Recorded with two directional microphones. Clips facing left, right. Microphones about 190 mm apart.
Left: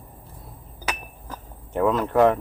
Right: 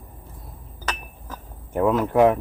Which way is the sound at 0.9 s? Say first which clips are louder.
Even; 10° left (ahead or behind).